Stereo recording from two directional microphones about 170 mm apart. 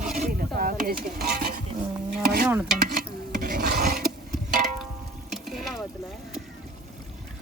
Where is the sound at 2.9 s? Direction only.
55° right (ahead or behind).